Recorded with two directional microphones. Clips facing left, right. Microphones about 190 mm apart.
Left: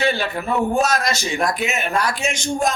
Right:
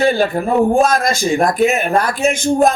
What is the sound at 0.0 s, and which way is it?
A man's voice, 50° right (ahead or behind).